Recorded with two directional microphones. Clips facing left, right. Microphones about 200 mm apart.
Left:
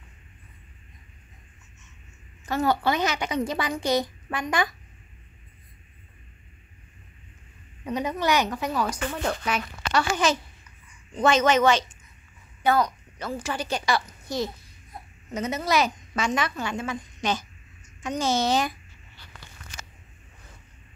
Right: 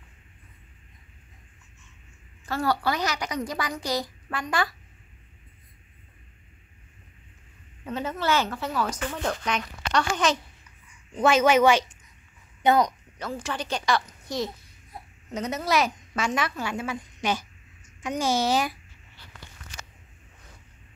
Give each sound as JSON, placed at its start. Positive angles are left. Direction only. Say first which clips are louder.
{"t": 2.4, "sound": "a woman's voice", "louder": "left 2 dB", "side_deg": 20}
{"t": 7.8, "sound": "speech", "louder": "left 2 dB", "side_deg": 15}
{"t": 11.1, "sound": "a woman's voice", "louder": "right 1 dB", "side_deg": -5}
{"t": 13.2, "sound": "a woman's voice", "louder": "left 1 dB", "side_deg": 5}